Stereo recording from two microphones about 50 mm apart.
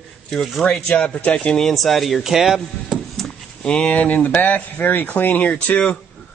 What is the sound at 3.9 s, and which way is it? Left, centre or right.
Speech, left.